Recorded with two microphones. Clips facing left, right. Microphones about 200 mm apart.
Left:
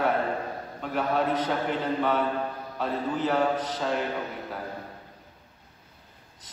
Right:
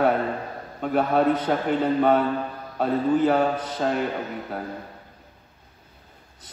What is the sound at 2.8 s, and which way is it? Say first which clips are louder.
A man's voice: right 8 dB; 50° right (ahead or behind).